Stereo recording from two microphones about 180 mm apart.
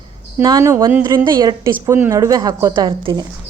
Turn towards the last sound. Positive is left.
turn(degrees=-25)  # may be behind; listen again after turning